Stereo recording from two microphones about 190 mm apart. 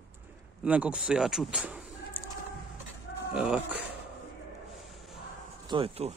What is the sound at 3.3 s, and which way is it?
Speech, 5° right (ahead or behind).